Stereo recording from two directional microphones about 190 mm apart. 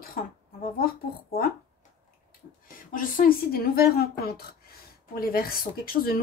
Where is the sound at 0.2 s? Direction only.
50° left (ahead or behind).